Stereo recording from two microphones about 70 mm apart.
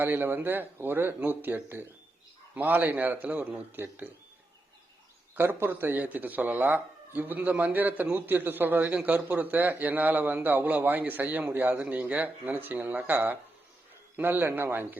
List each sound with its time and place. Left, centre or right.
0.0 s speech: right
5.3 s speech: right